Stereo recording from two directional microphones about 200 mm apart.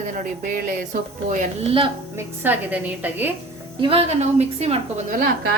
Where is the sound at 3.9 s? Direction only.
30° right (ahead or behind).